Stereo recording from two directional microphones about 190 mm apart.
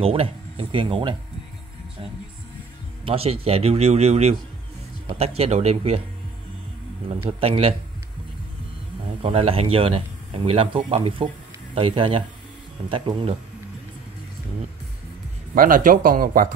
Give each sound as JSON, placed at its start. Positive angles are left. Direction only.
{"t": 0.0, "sound": "speech", "side_deg": -30}
{"t": 3.1, "sound": "speech", "side_deg": -30}
{"t": 7.2, "sound": "speech", "side_deg": -30}
{"t": 9.2, "sound": "speech", "side_deg": -30}
{"t": 15.5, "sound": "speech", "side_deg": -45}